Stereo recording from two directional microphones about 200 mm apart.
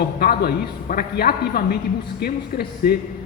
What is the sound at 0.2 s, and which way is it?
A man's voice, 50° left (ahead or behind).